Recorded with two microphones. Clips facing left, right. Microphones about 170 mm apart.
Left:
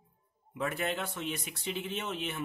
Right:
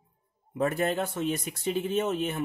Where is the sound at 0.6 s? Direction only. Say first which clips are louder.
Right 7 dB; 40° right (ahead or behind).